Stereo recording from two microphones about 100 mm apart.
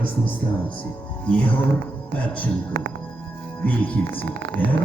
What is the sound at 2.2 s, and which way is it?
Speech, 15° left (ahead or behind).